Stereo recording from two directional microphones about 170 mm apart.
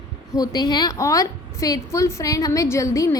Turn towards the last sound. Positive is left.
turn(degrees=20)  # may be behind; listen again after turning